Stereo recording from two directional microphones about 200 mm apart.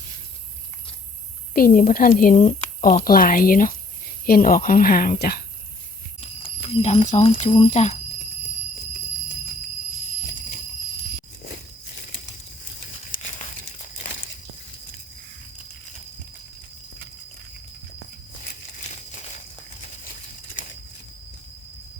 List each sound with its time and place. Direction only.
1.5 s speech: 45° left (ahead or behind)
3.0 s speech: 45° left (ahead or behind)
6.1 s speech: 30° left (ahead or behind)
13.1 s crumpling: 45° left (ahead or behind)